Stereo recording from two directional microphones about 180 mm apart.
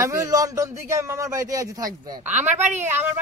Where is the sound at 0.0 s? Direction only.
20° right (ahead or behind).